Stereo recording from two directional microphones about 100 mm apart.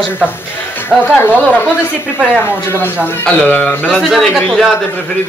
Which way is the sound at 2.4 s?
25° left (ahead or behind).